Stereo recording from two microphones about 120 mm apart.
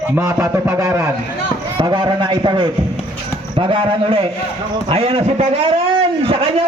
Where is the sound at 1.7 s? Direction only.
40° right (ahead or behind).